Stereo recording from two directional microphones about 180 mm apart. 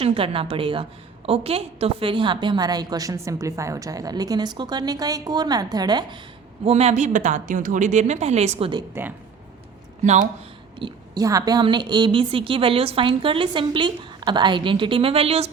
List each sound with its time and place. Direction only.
0.0 s a woman's voice: 30° right (ahead or behind)
6.7 s a woman's voice: 35° right (ahead or behind)
10.0 s a woman's voice: 40° right (ahead or behind)
10.8 s a woman's voice: 25° right (ahead or behind)